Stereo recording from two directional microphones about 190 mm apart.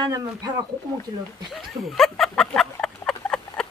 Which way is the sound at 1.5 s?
Centre (ahead or behind).